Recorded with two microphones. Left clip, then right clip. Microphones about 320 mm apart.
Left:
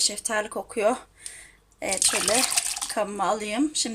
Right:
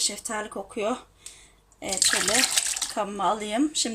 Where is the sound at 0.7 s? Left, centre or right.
Left.